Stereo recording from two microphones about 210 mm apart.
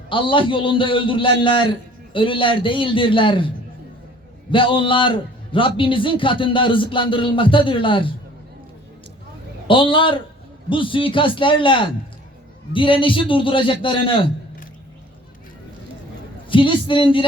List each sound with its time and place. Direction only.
0.1 s a man's voice: 25° left (ahead or behind)
4.5 s a man's voice: 25° left (ahead or behind)
9.6 s a man's voice: 25° left (ahead or behind)
16.5 s a man's voice: 25° left (ahead or behind)